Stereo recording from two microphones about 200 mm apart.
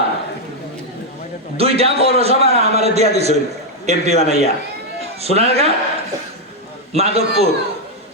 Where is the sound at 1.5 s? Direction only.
30° right (ahead or behind).